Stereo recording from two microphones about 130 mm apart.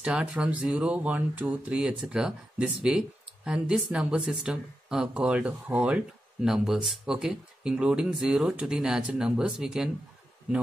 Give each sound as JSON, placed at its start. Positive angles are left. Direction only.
{"t": 0.0, "sound": "speech", "side_deg": -10}